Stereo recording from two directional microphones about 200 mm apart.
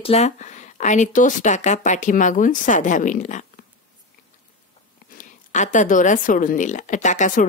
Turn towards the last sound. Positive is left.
turn(degrees=40)  # may be behind; listen again after turning